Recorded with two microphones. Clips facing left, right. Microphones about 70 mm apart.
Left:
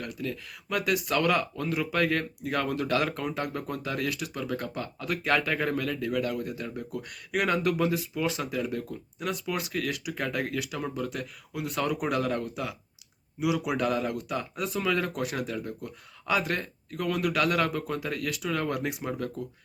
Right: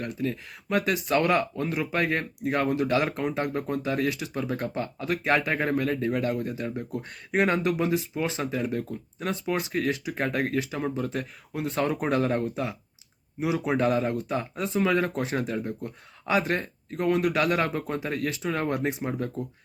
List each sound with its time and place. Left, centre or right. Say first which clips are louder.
0.0 s speech: right 4 dB; right